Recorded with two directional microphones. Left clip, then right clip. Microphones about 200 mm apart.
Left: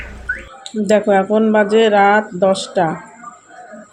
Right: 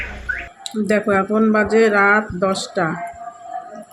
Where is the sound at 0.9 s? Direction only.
15° left (ahead or behind).